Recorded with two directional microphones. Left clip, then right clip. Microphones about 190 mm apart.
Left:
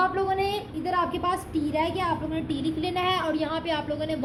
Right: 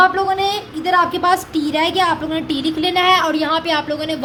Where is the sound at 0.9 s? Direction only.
30° right (ahead or behind).